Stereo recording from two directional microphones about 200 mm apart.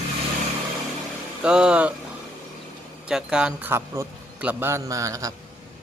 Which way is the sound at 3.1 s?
5° right (ahead or behind).